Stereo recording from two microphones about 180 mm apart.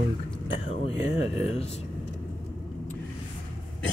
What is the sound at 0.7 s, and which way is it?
Speech, 35° left (ahead or behind).